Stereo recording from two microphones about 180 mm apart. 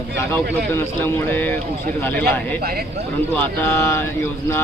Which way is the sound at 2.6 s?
60° right (ahead or behind).